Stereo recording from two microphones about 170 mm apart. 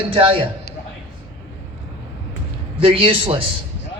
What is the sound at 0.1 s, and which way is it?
Speech, 30° right (ahead or behind).